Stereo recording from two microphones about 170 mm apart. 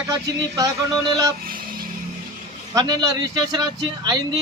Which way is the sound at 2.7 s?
20° right (ahead or behind).